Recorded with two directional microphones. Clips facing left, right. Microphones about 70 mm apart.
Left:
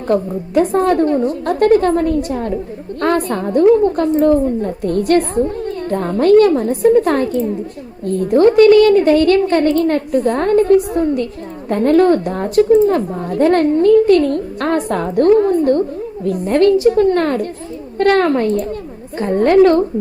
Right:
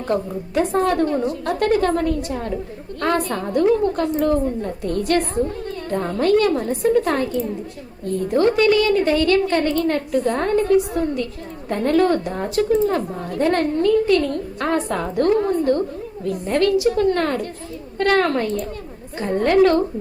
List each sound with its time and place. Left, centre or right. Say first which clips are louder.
0.1 s a woman's voice: left 7 dB; left